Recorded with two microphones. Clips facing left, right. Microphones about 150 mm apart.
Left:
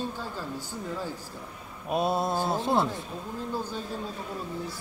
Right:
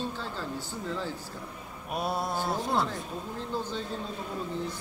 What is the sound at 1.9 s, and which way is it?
Speech, 25° left (ahead or behind).